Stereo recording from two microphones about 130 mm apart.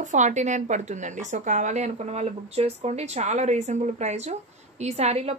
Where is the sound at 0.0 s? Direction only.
70° right (ahead or behind).